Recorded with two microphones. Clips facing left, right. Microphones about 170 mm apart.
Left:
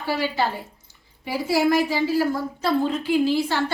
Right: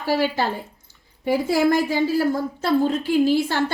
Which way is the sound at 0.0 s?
40° right (ahead or behind).